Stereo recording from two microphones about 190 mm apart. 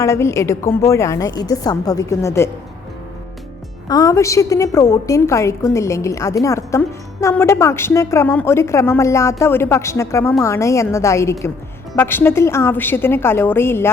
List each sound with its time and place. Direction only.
0.0 s a woman's voice: 15° left (ahead or behind)
3.8 s a woman's voice: 20° left (ahead or behind)